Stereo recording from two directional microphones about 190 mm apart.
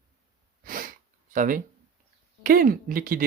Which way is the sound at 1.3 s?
45° right (ahead or behind).